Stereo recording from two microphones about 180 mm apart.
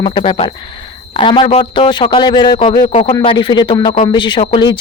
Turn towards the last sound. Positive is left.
turn(degrees=25)  # may be behind; listen again after turning